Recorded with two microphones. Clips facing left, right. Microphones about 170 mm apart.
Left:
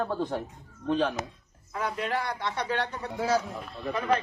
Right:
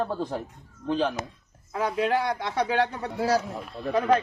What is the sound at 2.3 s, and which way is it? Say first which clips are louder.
Speech: right 4 dB; 60° right (ahead or behind).